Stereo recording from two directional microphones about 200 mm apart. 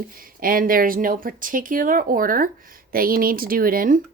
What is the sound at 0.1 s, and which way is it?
Speech, 45° right (ahead or behind).